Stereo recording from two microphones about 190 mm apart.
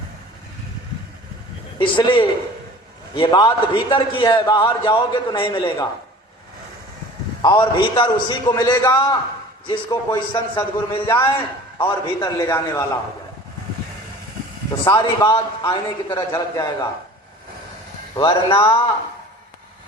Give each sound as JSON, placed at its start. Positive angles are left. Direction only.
{"t": 1.8, "sound": "a man's voice", "side_deg": 25}
{"t": 7.4, "sound": "a man's voice", "side_deg": 25}
{"t": 11.2, "sound": "a man's voice", "side_deg": 15}
{"t": 11.8, "sound": "a man's voice", "side_deg": 25}
{"t": 14.8, "sound": "a man's voice", "side_deg": 15}
{"t": 18.1, "sound": "a man's voice", "side_deg": 20}